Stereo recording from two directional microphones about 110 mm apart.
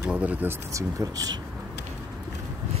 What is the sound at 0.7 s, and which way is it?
Speech, 30° right (ahead or behind).